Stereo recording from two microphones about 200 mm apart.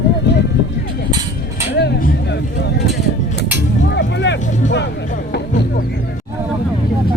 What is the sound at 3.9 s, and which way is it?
Vehicle, 60° left (ahead or behind).